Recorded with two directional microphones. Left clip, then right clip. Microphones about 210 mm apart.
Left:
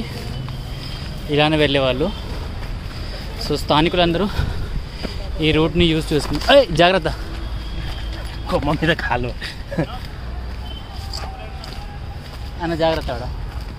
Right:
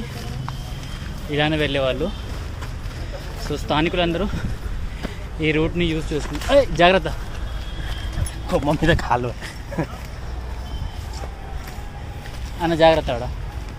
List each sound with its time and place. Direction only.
1.3 s speech: 20° left (ahead or behind)
3.5 s speech: 20° left (ahead or behind)
5.4 s speech: 15° left (ahead or behind)
5.8 s speech: 30° left (ahead or behind)
6.8 s speech: 20° left (ahead or behind)
8.5 s speech: 5° right (ahead or behind)
12.6 s speech: 35° right (ahead or behind)